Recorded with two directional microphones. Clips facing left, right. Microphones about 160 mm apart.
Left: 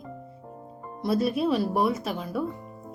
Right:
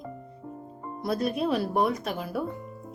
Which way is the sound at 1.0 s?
Centre (ahead or behind).